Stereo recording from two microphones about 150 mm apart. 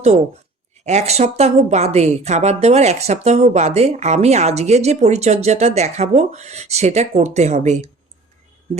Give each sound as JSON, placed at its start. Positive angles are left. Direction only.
{"t": 0.9, "sound": "speech", "side_deg": -45}